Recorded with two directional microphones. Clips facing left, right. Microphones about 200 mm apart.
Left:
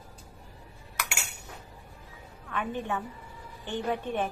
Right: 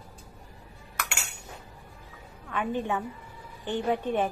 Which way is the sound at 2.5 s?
15° right (ahead or behind).